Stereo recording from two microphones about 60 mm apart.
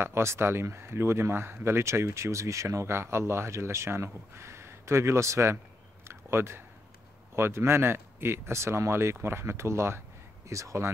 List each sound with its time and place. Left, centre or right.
0.0 s speech: right
6.0 s a sound: right
7.3 s speech: right
10.5 s speech: right